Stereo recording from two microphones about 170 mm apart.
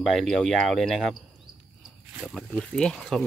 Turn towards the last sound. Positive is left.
turn(degrees=5)  # may be behind; listen again after turning